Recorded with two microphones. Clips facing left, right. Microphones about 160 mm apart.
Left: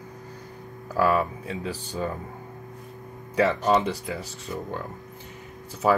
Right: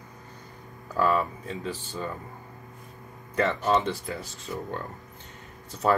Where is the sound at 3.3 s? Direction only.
15° left (ahead or behind).